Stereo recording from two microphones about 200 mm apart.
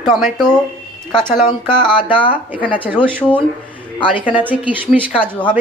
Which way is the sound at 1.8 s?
25° left (ahead or behind).